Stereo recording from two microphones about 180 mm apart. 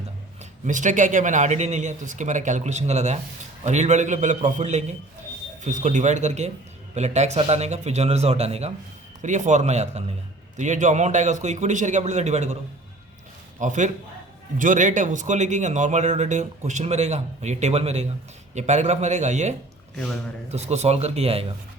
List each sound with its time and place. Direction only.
0.6 s a man's voice: 45° right (ahead or behind)
13.6 s a man's voice: 45° right (ahead or behind)